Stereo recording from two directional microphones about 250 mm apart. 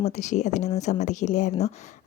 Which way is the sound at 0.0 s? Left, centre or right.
Left.